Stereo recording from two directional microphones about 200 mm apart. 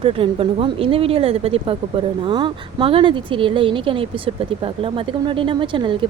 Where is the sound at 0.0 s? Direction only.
25° right (ahead or behind).